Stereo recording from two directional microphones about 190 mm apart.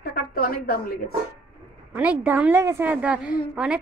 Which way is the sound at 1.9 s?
10° right (ahead or behind).